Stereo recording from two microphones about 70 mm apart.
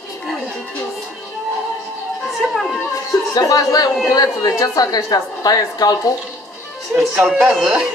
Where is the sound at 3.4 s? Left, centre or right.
Left.